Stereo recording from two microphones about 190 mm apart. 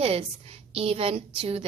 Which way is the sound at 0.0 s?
30° right (ahead or behind).